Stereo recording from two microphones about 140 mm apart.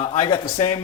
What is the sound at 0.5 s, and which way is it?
Speech, 50° left (ahead or behind).